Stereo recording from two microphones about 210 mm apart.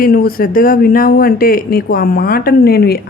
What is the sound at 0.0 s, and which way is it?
A woman's voice, 45° left (ahead or behind).